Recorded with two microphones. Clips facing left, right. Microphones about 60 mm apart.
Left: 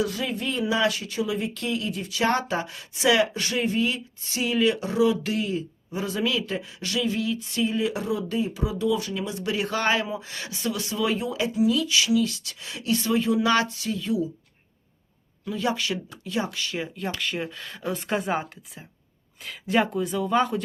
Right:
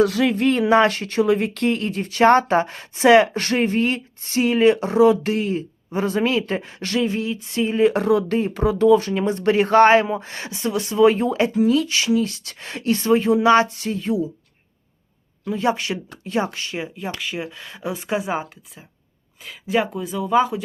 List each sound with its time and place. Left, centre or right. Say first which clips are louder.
0.0 s speech: right 10 dB; right
7.9 s speech: right 8 dB; right
15.4 s speech: right 5 dB; right
17.2 s speech: right 1 dB; centre